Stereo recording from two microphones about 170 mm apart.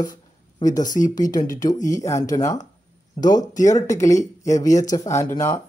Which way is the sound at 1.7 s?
20° left (ahead or behind).